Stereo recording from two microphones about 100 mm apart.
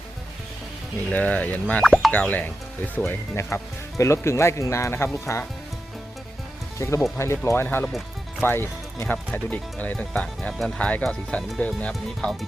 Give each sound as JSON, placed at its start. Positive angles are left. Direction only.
{"t": 1.1, "sound": "speech", "side_deg": 15}
{"t": 2.1, "sound": "speech", "side_deg": 15}
{"t": 6.7, "sound": "speech", "side_deg": 30}